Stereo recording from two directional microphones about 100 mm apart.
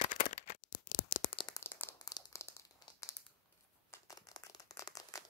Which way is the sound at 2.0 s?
35° left (ahead or behind).